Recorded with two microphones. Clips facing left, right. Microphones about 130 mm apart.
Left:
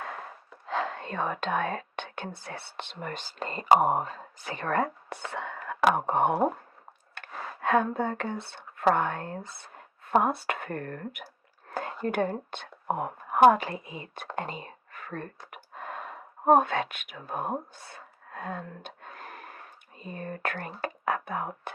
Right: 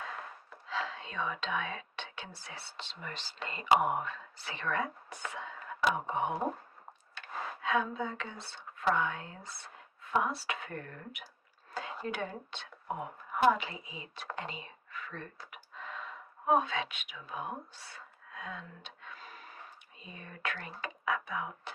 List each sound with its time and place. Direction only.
0.7 s speech: 55° left (ahead or behind)
5.3 s speech: 65° left (ahead or behind)
7.2 s speech: 55° left (ahead or behind)
11.7 s whispering: 50° left (ahead or behind)
12.0 s a woman's voice: 55° left (ahead or behind)
14.3 s whispering: 50° left (ahead or behind)
20.0 s a woman's voice: 50° left (ahead or behind)